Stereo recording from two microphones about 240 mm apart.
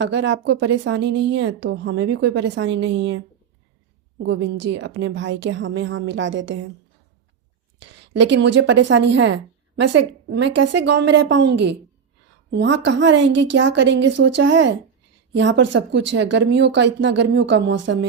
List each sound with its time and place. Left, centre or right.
0.0 s a woman's voice: right
7.8 s a woman's voice: right